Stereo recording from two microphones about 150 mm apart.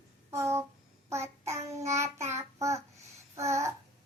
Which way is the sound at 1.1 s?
20° right (ahead or behind).